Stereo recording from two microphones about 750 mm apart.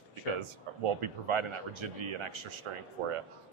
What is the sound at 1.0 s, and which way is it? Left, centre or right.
Speech, right.